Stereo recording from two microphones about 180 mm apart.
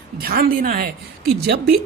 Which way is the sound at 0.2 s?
55° right (ahead or behind).